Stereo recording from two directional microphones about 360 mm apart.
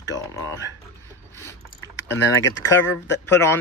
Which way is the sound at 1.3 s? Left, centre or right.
Centre.